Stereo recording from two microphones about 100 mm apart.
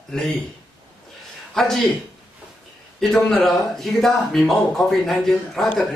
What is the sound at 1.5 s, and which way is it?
Speech, 5° left (ahead or behind).